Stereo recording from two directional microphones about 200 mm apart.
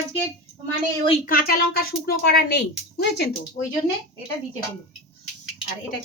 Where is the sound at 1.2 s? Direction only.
45° left (ahead or behind).